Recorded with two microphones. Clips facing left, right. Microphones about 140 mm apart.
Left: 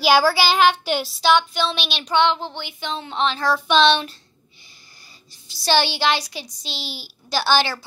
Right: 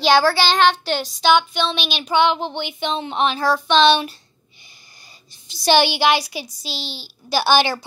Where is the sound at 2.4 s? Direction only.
20° right (ahead or behind).